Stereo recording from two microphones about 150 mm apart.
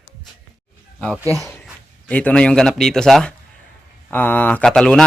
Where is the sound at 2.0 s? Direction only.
10° left (ahead or behind).